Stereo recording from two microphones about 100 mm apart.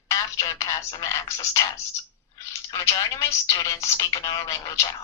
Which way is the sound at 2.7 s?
35° left (ahead or behind).